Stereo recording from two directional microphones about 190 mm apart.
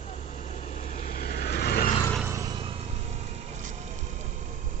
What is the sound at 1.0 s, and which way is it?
Vehicle, 50° left (ahead or behind).